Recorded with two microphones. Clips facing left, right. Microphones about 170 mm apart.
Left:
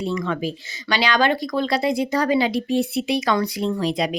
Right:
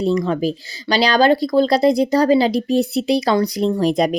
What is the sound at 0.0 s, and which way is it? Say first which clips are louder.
Speech: right 6 dB; 35° right (ahead or behind).